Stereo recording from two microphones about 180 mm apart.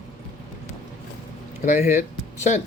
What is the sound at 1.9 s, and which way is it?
Speech, 40° left (ahead or behind).